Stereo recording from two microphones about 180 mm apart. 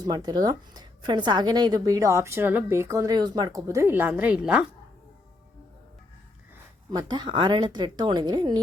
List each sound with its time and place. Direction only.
0.0 s a woman's voice: 20° right (ahead or behind)
6.9 s a woman's voice: 25° right (ahead or behind)